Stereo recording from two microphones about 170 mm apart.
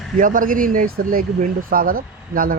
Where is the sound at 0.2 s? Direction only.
50° right (ahead or behind).